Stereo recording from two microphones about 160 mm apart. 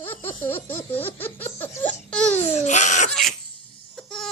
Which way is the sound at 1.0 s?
10° left (ahead or behind).